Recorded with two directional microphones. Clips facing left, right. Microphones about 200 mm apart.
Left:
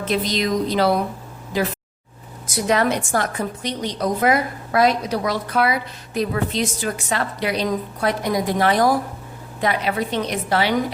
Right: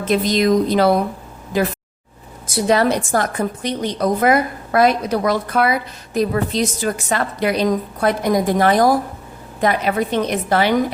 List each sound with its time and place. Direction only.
0.0 s a woman's voice: 50° right (ahead or behind)
2.6 s a woman's voice: 35° right (ahead or behind); by 10.8 s 50° right (ahead or behind)